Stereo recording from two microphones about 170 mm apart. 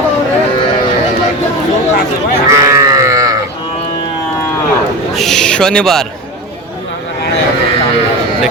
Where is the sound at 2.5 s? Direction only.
20° right (ahead or behind).